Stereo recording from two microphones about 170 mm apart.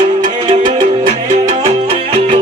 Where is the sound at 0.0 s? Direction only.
30° right (ahead or behind).